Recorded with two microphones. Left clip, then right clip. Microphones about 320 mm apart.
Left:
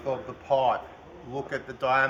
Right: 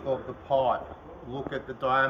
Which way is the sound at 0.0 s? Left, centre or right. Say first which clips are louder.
Even; centre.